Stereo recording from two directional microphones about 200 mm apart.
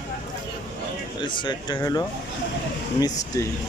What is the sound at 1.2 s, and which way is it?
Speech, 25° left (ahead or behind).